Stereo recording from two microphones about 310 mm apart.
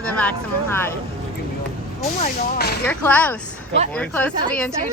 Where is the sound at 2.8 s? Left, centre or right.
Centre.